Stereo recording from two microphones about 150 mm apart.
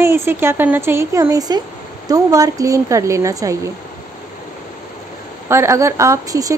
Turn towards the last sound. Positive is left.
turn(degrees=-25)  # may be behind; listen again after turning